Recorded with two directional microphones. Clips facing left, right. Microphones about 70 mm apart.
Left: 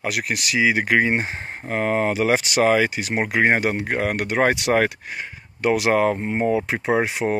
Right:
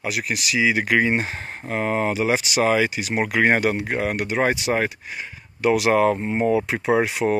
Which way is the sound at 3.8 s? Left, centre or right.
Left.